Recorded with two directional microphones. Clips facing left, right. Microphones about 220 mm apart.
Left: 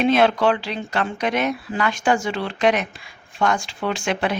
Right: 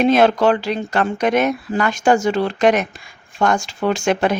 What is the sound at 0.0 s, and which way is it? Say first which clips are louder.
Speech: right 3 dB; 40° right (ahead or behind).